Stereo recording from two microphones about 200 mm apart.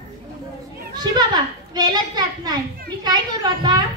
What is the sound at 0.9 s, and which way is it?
A child's voice, 20° right (ahead or behind).